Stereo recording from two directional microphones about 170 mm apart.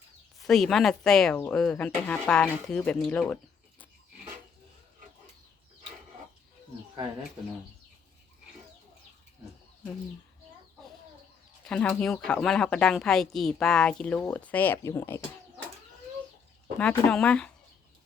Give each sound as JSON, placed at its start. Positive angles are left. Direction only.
{"t": 0.3, "sound": "speech", "side_deg": 0}
{"t": 11.6, "sound": "speech", "side_deg": 5}
{"t": 17.1, "sound": "speech", "side_deg": 5}